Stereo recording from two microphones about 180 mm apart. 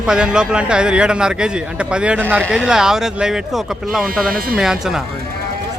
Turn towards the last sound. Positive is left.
turn(degrees=0)  # may be behind; listen again after turning